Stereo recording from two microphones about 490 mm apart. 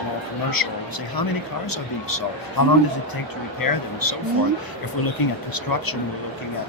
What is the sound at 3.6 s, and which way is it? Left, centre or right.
Speech, left.